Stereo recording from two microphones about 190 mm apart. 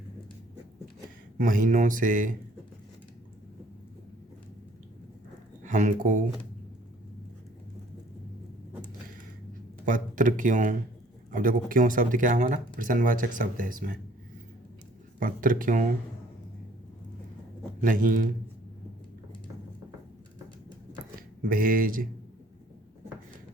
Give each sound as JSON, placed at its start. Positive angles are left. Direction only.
{"t": 1.4, "sound": "speech", "side_deg": -45}
{"t": 5.6, "sound": "speech", "side_deg": -40}
{"t": 9.8, "sound": "speech", "side_deg": -45}
{"t": 15.2, "sound": "speech", "side_deg": -45}
{"t": 17.7, "sound": "a man's voice", "side_deg": -45}
{"t": 21.2, "sound": "speech", "side_deg": -50}